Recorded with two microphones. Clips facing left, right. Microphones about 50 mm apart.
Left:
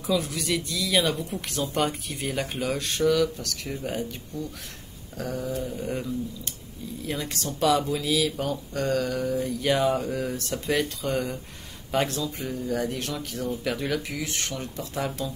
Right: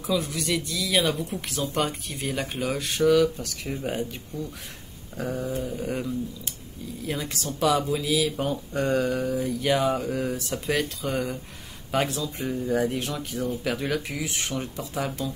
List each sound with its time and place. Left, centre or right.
0.0 s speech: centre
5.1 s a sound: centre
5.6 s speech: centre
8.4 s speech: centre
9.3 s speech: centre
12.6 s speech: centre
15.0 s speech: centre